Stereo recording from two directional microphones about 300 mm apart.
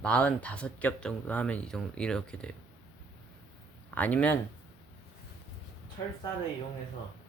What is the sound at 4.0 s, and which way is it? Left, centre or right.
Speech, centre.